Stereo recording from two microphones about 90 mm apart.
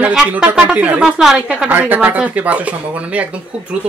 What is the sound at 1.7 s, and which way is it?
Speech, 20° right (ahead or behind).